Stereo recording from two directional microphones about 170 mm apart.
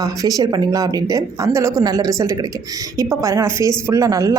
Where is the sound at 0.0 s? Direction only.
20° right (ahead or behind).